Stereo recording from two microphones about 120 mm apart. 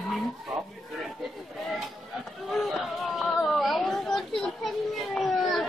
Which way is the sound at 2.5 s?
Centre (ahead or behind).